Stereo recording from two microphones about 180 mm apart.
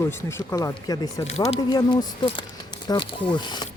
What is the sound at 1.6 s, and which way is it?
Speech, 20° left (ahead or behind).